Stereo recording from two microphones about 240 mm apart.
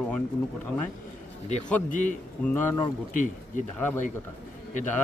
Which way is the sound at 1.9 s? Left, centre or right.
Left.